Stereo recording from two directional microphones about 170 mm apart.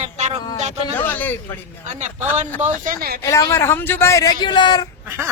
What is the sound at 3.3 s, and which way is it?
A man's voice, 15° left (ahead or behind).